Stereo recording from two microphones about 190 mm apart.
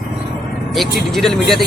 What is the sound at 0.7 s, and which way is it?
Speech, centre (ahead or behind).